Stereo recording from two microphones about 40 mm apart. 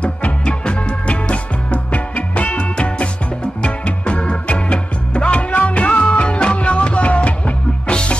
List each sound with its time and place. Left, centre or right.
0.0 s music: left
7.8 s music: left